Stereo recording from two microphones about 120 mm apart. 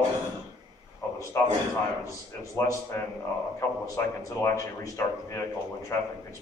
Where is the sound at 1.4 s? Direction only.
25° left (ahead or behind).